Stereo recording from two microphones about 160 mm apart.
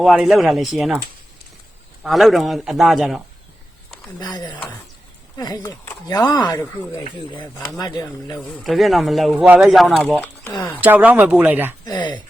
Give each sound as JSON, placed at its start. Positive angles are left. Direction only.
{"t": 0.0, "sound": "speech", "side_deg": 0}
{"t": 2.0, "sound": "speech", "side_deg": 0}
{"t": 4.2, "sound": "speech", "side_deg": 25}
{"t": 8.6, "sound": "speech", "side_deg": 0}
{"t": 10.8, "sound": "speech", "side_deg": -10}